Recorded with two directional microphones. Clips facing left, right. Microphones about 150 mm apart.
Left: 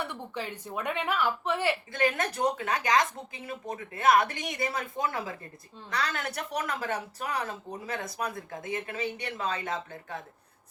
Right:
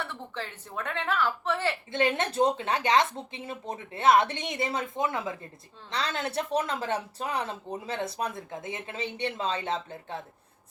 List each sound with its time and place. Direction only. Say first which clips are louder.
0.0 s a woman's voice: left 1 dB; 15° left (ahead or behind)
1.9 s speech: right 1 dB; 25° right (ahead or behind)